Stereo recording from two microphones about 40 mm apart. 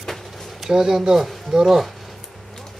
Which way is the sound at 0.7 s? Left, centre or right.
Centre.